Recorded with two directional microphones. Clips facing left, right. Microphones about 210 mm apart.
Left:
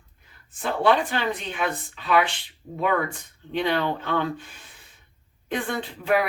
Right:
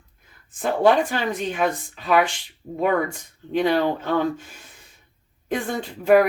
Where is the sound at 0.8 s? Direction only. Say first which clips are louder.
Right 3 dB; 45° right (ahead or behind).